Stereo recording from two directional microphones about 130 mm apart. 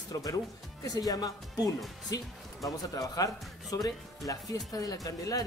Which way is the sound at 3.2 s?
30° left (ahead or behind).